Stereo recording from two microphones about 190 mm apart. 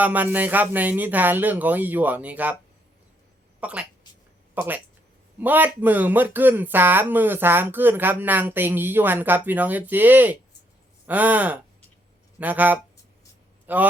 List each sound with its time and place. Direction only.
0.0 s speech: 10° right (ahead or behind)
3.6 s speech: 5° right (ahead or behind)